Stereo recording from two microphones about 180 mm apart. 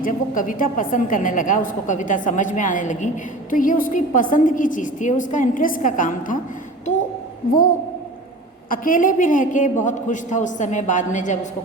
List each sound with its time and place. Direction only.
0.0 s a woman's voice: 45° left (ahead or behind)
8.7 s a woman's voice: 50° left (ahead or behind)